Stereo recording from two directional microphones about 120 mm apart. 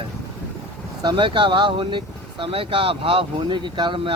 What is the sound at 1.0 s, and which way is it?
Speech, 45° right (ahead or behind).